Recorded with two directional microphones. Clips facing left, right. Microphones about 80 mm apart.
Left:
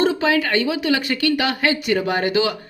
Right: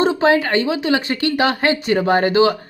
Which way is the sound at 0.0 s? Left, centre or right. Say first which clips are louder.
Right 3 dB; right.